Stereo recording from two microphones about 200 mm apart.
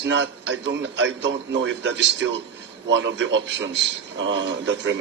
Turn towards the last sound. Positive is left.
turn(degrees=-65)  # may be behind; listen again after turning